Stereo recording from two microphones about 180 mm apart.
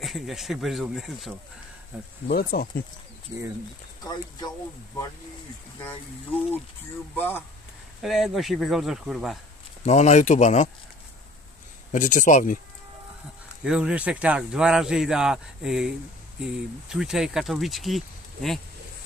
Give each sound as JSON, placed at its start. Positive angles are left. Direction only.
{"t": 0.0, "sound": "speech", "side_deg": 0}
{"t": 2.2, "sound": "speech", "side_deg": 55}
{"t": 4.0, "sound": "speech", "side_deg": 20}
{"t": 5.9, "sound": "a sound", "side_deg": 10}
{"t": 8.0, "sound": "speech", "side_deg": 0}
{"t": 9.8, "sound": "speech", "side_deg": 40}
{"t": 11.9, "sound": "speech", "side_deg": 45}
{"t": 13.7, "sound": "speech", "side_deg": -5}